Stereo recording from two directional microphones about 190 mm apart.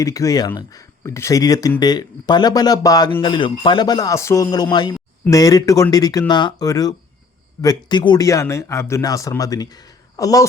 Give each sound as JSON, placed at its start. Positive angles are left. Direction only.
{"t": 0.0, "sound": "speech", "side_deg": 15}